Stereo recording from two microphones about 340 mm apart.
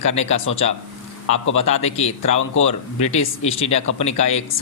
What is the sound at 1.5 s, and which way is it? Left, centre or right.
Speech, centre.